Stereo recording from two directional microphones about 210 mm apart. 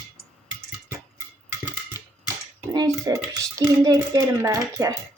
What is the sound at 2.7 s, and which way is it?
Speech, 15° right (ahead or behind).